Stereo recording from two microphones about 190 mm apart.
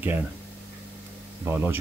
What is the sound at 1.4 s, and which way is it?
Speech, 10° right (ahead or behind).